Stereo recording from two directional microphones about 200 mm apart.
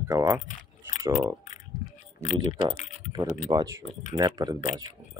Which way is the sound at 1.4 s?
40° left (ahead or behind).